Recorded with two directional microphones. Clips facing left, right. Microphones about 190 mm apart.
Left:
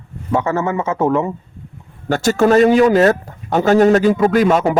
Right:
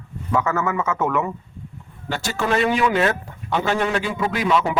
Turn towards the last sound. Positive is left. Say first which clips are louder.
# left 7 dB
turn(degrees=45)  # may be behind; listen again after turning